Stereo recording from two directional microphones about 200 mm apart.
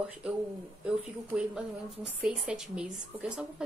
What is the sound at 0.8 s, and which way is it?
A woman's voice, 5° right (ahead or behind).